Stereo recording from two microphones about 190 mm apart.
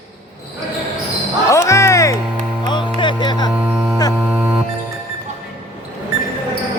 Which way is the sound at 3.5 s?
5° right (ahead or behind).